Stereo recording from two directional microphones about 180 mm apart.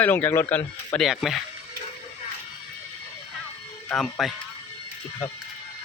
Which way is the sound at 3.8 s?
5° left (ahead or behind).